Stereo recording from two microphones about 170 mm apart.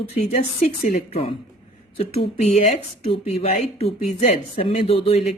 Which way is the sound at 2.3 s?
40° left (ahead or behind).